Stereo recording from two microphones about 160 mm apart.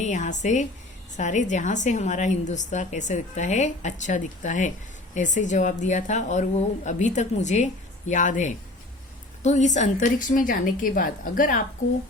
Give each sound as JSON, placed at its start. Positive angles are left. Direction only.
{"t": 0.0, "sound": "a woman's voice", "side_deg": 50}